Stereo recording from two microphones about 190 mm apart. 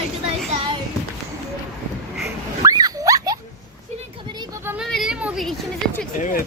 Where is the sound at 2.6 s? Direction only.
20° right (ahead or behind).